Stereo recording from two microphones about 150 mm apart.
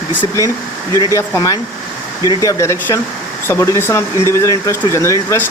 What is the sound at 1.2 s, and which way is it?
Speech, 20° left (ahead or behind).